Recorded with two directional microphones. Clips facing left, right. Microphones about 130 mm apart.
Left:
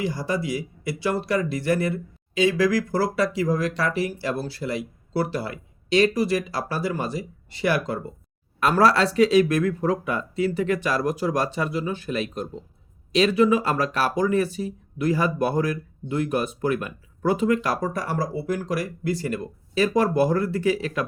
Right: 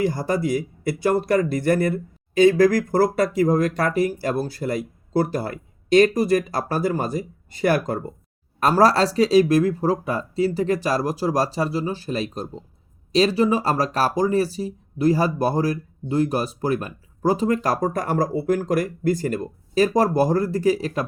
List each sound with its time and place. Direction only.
0.0 s speech: 50° right (ahead or behind)